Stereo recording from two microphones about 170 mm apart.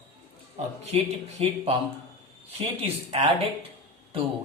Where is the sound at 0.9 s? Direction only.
35° right (ahead or behind).